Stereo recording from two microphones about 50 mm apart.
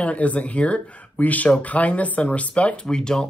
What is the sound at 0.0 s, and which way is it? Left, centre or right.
Speech, left.